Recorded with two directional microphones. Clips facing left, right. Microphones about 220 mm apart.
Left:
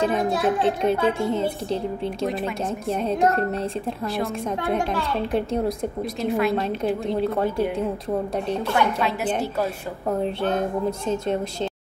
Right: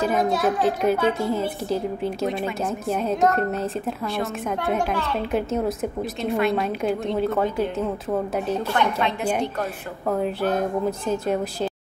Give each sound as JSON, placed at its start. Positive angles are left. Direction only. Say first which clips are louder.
{"t": 0.6, "sound": "speech", "louder": "even", "side_deg": 30}
{"t": 1.7, "sound": "speech", "louder": "right 1 dB", "side_deg": 0}
{"t": 3.1, "sound": "speech", "louder": "even", "side_deg": 30}
{"t": 5.3, "sound": "speech", "louder": "right 1 dB", "side_deg": -5}
{"t": 8.7, "sound": "speech", "louder": "left 3 dB", "side_deg": 5}